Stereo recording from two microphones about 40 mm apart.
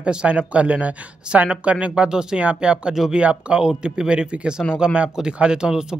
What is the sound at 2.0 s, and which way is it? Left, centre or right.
Speech, centre.